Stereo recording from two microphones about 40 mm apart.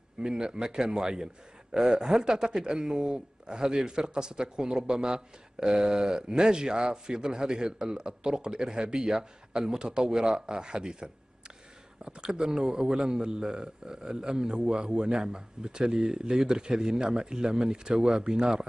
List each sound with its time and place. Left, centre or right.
0.2 s a man's voice: centre